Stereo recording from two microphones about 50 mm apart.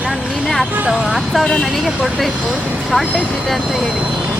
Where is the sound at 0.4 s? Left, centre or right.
Centre.